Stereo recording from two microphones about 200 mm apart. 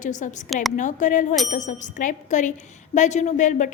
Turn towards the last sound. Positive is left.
turn(degrees=40)  # may be behind; listen again after turning